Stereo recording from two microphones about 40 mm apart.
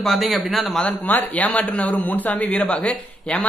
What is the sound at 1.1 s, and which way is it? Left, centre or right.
Speech, left.